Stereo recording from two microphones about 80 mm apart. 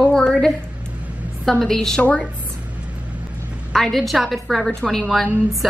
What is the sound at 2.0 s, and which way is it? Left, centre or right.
Speech, centre.